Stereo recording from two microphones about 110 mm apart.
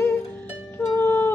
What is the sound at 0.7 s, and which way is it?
Harp, 20° left (ahead or behind).